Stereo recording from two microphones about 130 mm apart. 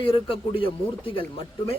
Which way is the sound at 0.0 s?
45° left (ahead or behind).